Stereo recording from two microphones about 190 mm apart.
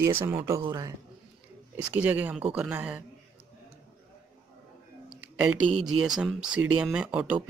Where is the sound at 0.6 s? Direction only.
20° right (ahead or behind).